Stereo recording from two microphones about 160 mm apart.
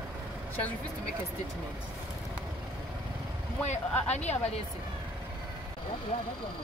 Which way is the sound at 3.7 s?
45° left (ahead or behind).